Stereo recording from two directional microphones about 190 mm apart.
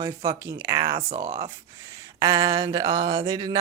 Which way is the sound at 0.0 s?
20° right (ahead or behind).